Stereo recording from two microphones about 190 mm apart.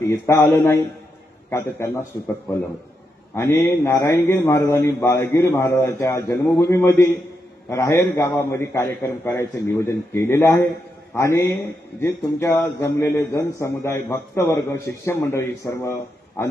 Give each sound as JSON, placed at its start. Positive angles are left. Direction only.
{"t": 0.0, "sound": "a man's voice", "side_deg": 15}
{"t": 3.3, "sound": "a man's voice", "side_deg": 15}
{"t": 12.4, "sound": "a man's voice", "side_deg": 15}